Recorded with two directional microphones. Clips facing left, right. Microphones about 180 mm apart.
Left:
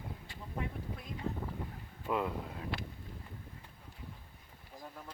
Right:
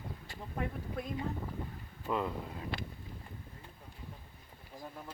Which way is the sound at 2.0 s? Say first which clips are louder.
Even; 5° left (ahead or behind).